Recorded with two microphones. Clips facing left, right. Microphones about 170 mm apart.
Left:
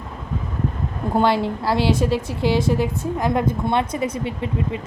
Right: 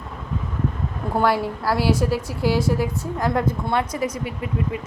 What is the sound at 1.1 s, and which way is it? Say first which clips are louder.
A woman's voice: left 2 dB; 20° left (ahead or behind).